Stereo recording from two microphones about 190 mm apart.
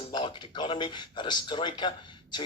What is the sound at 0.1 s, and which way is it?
Speech, 25° left (ahead or behind).